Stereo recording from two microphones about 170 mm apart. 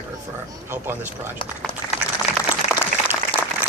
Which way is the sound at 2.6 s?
40° left (ahead or behind).